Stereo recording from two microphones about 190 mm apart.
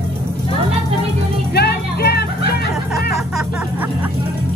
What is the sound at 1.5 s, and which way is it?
Music, 60° left (ahead or behind).